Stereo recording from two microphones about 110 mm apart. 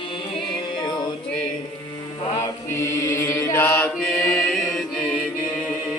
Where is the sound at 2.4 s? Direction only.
25° left (ahead or behind).